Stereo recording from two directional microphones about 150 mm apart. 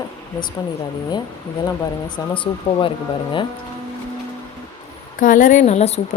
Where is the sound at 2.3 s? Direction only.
35° left (ahead or behind).